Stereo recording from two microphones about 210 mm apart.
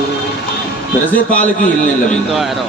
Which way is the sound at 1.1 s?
5° left (ahead or behind).